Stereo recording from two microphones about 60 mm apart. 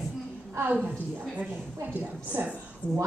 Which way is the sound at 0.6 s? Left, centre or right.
Right.